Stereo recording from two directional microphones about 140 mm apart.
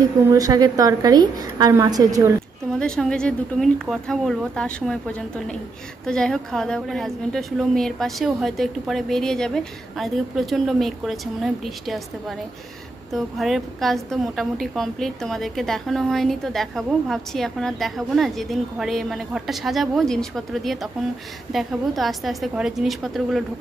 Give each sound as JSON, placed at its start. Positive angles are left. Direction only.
{"t": 0.3, "sound": "a woman's voice", "side_deg": -25}
{"t": 2.8, "sound": "a woman's voice", "side_deg": 5}